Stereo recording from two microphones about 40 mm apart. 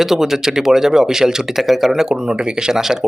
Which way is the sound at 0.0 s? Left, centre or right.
Centre.